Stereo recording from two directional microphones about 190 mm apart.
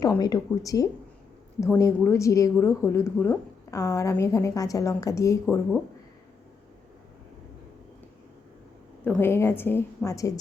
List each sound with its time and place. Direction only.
0.0 s a woman's voice: 20° left (ahead or behind)
9.0 s a woman's voice: 10° left (ahead or behind)